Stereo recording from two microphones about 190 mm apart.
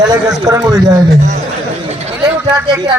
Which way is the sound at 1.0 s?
40° right (ahead or behind).